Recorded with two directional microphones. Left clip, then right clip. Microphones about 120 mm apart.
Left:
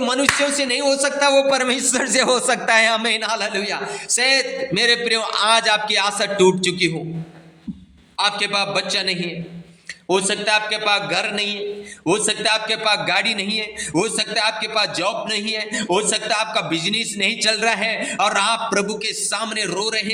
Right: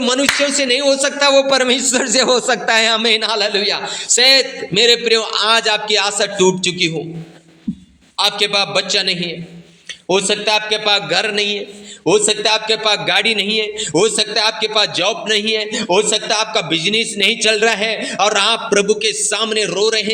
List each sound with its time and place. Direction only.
0.0 s a man's voice: 25° right (ahead or behind)
1.9 s a man's voice: 5° left (ahead or behind)
3.1 s a man's voice: 20° right (ahead or behind)
4.7 s a man's voice: 5° right (ahead or behind)
8.4 s a man's voice: 15° right (ahead or behind)